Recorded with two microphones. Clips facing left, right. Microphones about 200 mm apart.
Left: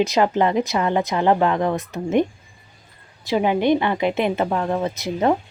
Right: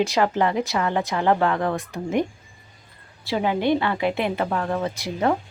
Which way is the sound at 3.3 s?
20° left (ahead or behind).